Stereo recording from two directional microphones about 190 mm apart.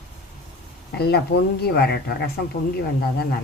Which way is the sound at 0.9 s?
60° left (ahead or behind).